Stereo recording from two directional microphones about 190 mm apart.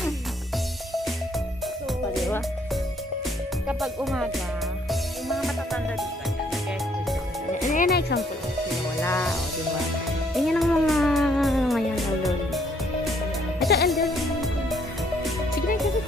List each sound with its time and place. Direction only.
3.6 s speech: centre (ahead or behind)
5.3 s music: centre (ahead or behind)
7.7 s speech: 50° left (ahead or behind)
10.3 s music: centre (ahead or behind)
13.8 s music: centre (ahead or behind)